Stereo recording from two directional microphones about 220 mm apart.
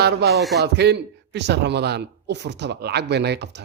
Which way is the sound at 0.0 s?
50° right (ahead or behind).